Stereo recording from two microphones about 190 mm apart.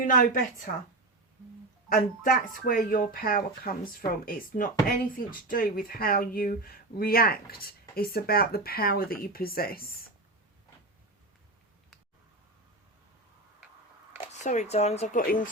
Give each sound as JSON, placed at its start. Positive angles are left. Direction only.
{"t": 0.0, "sound": "speech", "side_deg": 45}
{"t": 1.9, "sound": "speech", "side_deg": 45}
{"t": 14.4, "sound": "speech", "side_deg": 40}